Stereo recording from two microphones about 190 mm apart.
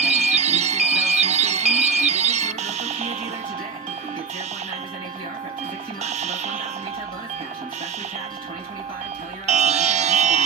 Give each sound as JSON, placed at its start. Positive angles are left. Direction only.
{"t": 0.0, "sound": "music", "side_deg": -35}
{"t": 6.0, "sound": "music", "side_deg": -35}
{"t": 9.5, "sound": "music", "side_deg": -35}